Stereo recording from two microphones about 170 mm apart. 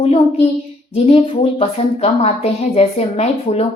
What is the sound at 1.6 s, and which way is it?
Speech, 40° left (ahead or behind).